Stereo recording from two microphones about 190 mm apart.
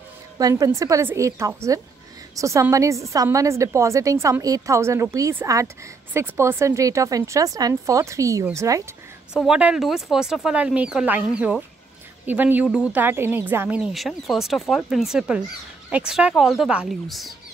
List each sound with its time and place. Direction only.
0.4 s a woman's voice: 20° right (ahead or behind)
9.5 s speech: 5° right (ahead or behind)